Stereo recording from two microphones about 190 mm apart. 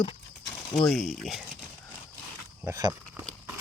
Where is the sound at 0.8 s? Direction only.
Centre (ahead or behind).